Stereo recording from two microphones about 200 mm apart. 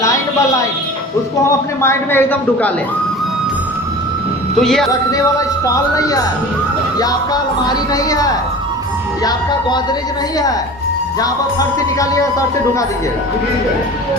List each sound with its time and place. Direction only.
1.5 s speech: 15° left (ahead or behind)
4.6 s speech: centre (ahead or behind)
4.9 s speech: 15° left (ahead or behind)
7.9 s speech: 20° left (ahead or behind)